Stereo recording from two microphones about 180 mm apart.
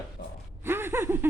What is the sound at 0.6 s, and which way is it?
Speech, 10° right (ahead or behind).